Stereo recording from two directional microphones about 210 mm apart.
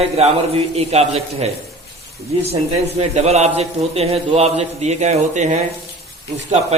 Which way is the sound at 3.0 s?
30° right (ahead or behind).